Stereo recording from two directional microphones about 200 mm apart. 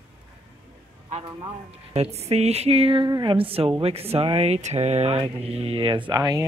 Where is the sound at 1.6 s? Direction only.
30° right (ahead or behind).